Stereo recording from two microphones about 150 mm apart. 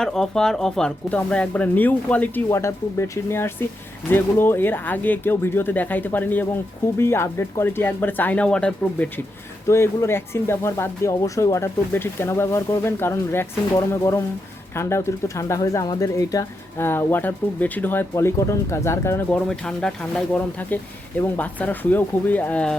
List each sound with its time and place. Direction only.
0.0 s speech: 5° left (ahead or behind)
19.5 s speech: 5° left (ahead or behind)